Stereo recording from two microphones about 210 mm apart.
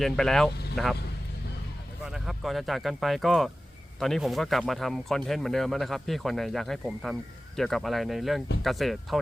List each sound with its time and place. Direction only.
0.0 s speech: centre (ahead or behind)
2.0 s speech: centre (ahead or behind)